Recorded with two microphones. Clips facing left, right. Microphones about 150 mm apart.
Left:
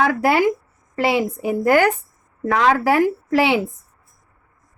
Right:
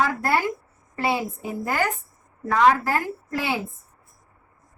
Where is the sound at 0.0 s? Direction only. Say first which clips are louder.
Left 6 dB; 80° left.